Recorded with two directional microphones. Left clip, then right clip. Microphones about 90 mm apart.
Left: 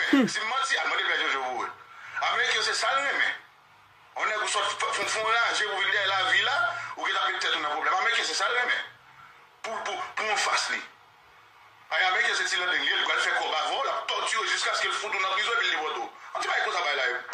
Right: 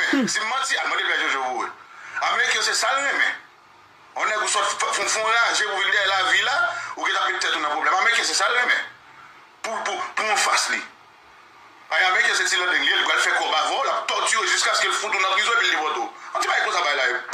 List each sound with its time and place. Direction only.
0.0 s radio: 35° right (ahead or behind)
4.1 s a man's voice: 35° right (ahead or behind)
11.9 s a man's voice: 35° right (ahead or behind)